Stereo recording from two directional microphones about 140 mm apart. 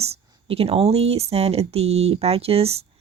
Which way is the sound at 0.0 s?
45° right (ahead or behind).